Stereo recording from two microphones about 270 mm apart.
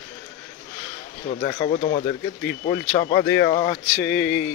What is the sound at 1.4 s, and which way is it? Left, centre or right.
Speech, left.